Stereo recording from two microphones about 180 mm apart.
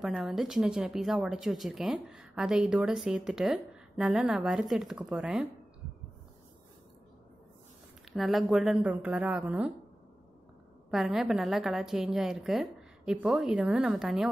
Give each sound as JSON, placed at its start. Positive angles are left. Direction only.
{"t": 0.0, "sound": "speech", "side_deg": 0}
{"t": 8.1, "sound": "a woman's voice", "side_deg": 0}
{"t": 10.9, "sound": "speech", "side_deg": 0}